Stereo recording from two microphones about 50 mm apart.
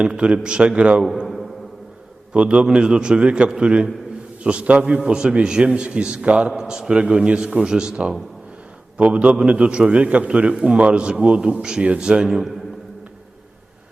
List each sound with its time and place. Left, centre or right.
0.0 s a man's voice: centre
2.3 s a man's voice: right